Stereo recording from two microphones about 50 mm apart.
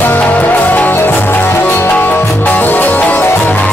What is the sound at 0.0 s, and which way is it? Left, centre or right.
Music, left.